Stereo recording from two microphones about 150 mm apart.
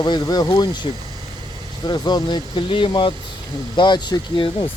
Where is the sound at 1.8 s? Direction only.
25° left (ahead or behind).